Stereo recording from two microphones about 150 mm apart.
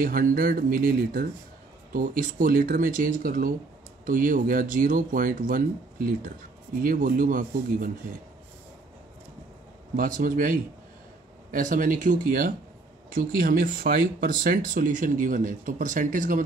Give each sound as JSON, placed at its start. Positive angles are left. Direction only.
{"t": 0.0, "sound": "speech", "side_deg": -70}
{"t": 9.9, "sound": "speech", "side_deg": -65}